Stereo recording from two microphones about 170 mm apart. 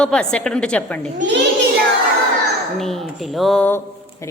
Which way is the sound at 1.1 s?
90° right.